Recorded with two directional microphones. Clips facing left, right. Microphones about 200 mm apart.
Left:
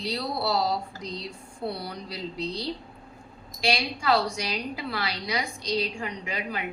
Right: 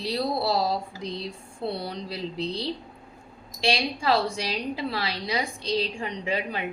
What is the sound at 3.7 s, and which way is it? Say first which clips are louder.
A woman's voice: right 1 dB; 30° right (ahead or behind).